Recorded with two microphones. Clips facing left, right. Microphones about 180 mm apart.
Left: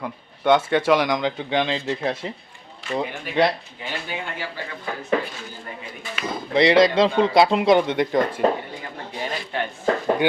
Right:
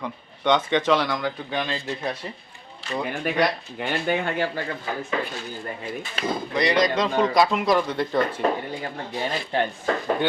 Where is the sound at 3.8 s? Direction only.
55° right (ahead or behind).